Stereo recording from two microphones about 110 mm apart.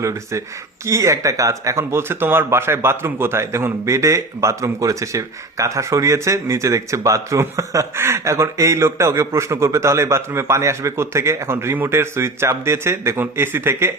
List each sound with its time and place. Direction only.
0.0 s speech: 25° right (ahead or behind)